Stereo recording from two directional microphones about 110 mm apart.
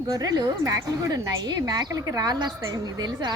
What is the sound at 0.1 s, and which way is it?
A woman's voice, 35° right (ahead or behind).